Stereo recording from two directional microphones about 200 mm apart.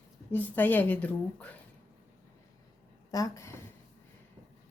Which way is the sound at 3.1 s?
15° left (ahead or behind).